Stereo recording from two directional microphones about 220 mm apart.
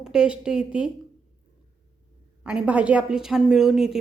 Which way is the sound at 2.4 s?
5° right (ahead or behind).